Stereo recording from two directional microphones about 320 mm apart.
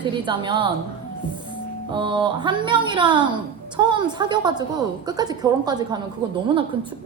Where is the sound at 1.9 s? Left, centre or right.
Centre.